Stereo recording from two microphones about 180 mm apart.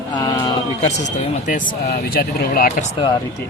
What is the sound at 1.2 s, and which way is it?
Speech, 45° left (ahead or behind).